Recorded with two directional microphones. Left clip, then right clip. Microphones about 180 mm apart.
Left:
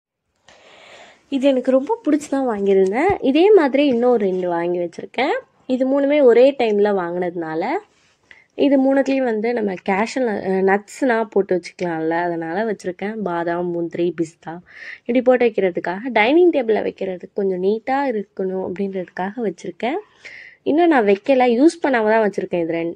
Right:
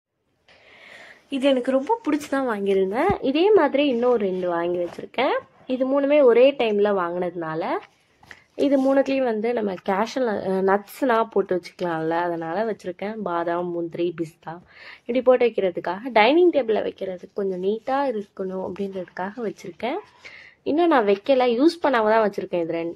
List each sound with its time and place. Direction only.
1.3 s a woman's voice: 20° left (ahead or behind)
2.4 s speech: 5° right (ahead or behind)
2.9 s a woman's voice: 20° left (ahead or behind)